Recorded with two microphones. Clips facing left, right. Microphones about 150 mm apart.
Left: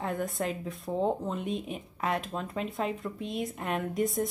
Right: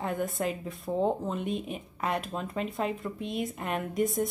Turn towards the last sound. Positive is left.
turn(degrees=0)  # may be behind; listen again after turning